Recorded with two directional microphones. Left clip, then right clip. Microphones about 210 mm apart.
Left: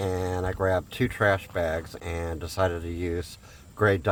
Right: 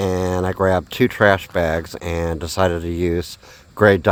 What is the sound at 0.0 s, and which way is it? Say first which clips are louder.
Speech: right 8 dB; 45° right (ahead or behind).